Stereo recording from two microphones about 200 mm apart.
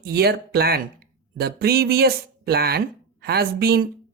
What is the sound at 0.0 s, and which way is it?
A woman's voice, 55° right (ahead or behind).